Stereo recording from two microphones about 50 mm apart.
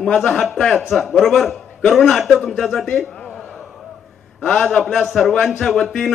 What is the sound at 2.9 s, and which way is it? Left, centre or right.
Speech, centre.